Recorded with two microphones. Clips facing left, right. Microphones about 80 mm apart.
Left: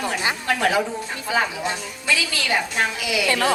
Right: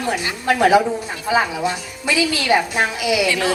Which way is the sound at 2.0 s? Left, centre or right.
Centre.